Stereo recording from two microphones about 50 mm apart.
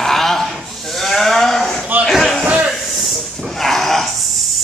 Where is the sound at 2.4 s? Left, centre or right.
Right.